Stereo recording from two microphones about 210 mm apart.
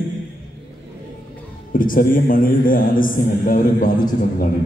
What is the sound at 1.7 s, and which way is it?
A man's voice, 40° left (ahead or behind).